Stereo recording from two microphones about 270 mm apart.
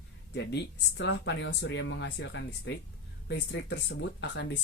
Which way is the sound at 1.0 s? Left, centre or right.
Left.